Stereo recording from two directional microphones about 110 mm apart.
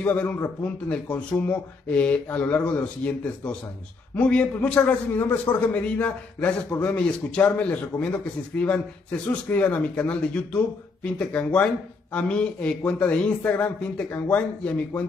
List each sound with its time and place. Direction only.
0.0 s a man's voice: 10° left (ahead or behind)
4.1 s a man's voice: 10° left (ahead or behind)